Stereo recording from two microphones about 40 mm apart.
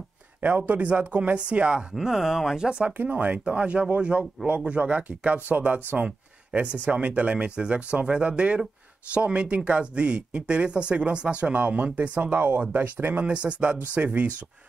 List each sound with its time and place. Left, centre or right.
0.6 s speech: right
2.0 s speech: centre
3.2 s speech: right
6.8 s speech: right
11.6 s speech: right
13.3 s speech: right